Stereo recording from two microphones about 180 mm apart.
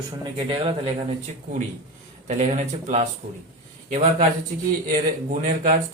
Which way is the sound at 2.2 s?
40° right (ahead or behind).